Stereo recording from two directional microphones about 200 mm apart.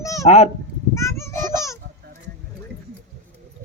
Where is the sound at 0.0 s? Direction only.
15° left (ahead or behind).